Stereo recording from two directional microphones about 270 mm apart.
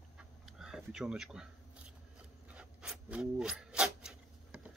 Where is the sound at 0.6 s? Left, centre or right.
Centre.